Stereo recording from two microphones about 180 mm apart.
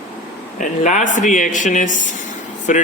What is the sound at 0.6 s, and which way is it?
Speech, 40° left (ahead or behind).